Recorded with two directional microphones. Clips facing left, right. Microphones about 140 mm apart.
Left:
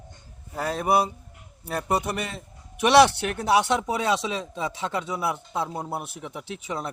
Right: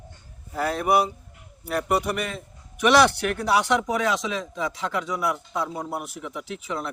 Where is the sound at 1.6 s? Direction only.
25° left (ahead or behind).